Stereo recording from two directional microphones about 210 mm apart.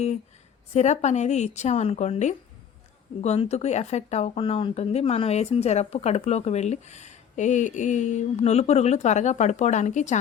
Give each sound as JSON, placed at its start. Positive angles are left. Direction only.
{"t": 0.7, "sound": "speech", "side_deg": 35}